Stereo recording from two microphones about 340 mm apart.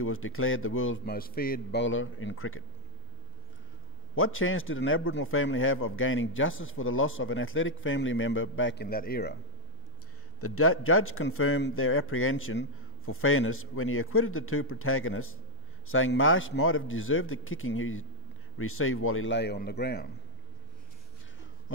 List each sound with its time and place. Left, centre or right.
0.0 s a man's voice: left
4.1 s a man's voice: left
10.4 s a man's voice: left